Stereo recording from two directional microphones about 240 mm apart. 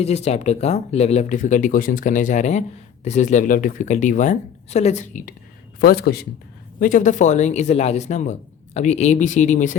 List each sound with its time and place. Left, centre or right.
0.0 s speech: left